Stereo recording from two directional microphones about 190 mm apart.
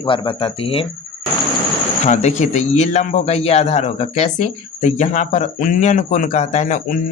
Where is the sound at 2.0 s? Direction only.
40° left (ahead or behind).